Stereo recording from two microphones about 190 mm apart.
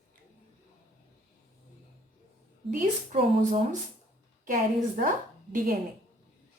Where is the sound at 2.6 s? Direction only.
40° right (ahead or behind).